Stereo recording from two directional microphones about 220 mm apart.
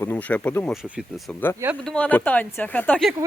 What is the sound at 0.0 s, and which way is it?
Speech, 10° left (ahead or behind).